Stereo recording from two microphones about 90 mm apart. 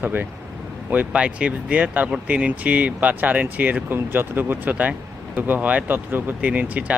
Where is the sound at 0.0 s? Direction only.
20° right (ahead or behind).